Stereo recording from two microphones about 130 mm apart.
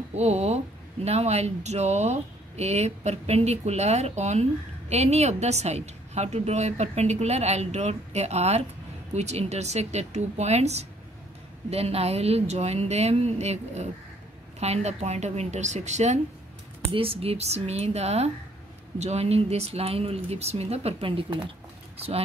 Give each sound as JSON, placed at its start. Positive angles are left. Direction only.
{"t": 0.1, "sound": "speech", "side_deg": -55}
{"t": 16.9, "sound": "speech", "side_deg": -45}